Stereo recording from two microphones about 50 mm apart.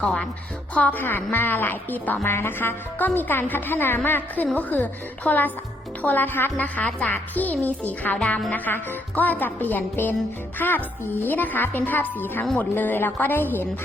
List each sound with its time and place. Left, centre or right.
0.0 s speech: centre
0.7 s a woman's voice: left
2.2 s a woman's voice: left
4.5 s a woman's voice: left